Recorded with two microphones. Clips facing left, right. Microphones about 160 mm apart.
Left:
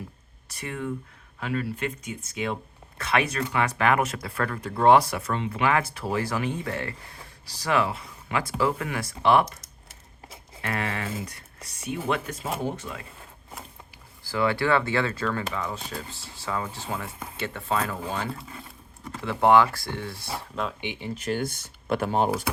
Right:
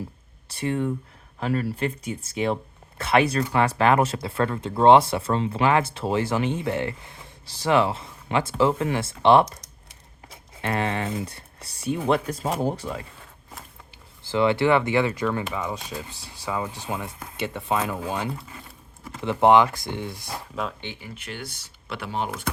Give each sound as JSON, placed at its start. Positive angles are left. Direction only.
{"t": 0.4, "sound": "speech", "side_deg": -30}
{"t": 9.6, "sound": "a sound", "side_deg": 0}
{"t": 10.6, "sound": "speech", "side_deg": -25}
{"t": 14.3, "sound": "speech", "side_deg": -20}
{"t": 20.8, "sound": "speech", "side_deg": 15}
{"t": 21.2, "sound": "speech", "side_deg": 45}